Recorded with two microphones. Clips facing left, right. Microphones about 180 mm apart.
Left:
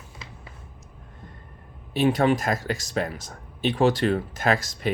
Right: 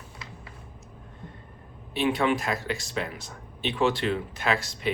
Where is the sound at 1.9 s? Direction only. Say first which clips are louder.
Left 4 dB; 40° left (ahead or behind).